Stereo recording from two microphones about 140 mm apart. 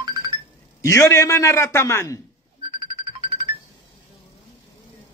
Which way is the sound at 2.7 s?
40° right (ahead or behind).